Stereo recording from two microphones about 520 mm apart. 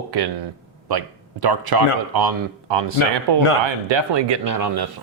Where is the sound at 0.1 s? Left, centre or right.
Right.